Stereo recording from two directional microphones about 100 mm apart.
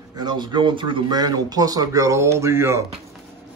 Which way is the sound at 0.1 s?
45° right (ahead or behind).